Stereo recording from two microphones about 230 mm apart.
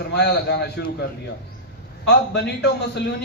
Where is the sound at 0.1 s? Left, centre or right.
Left.